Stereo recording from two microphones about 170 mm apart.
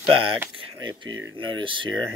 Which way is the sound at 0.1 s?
30° right (ahead or behind).